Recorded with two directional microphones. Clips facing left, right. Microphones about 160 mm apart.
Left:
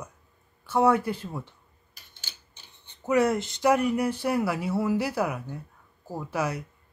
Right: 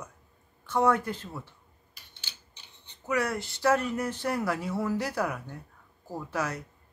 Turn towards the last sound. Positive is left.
turn(degrees=10)  # may be behind; listen again after turning